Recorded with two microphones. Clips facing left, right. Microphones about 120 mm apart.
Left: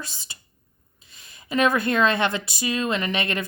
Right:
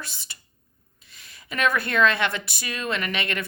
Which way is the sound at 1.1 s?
25° left (ahead or behind).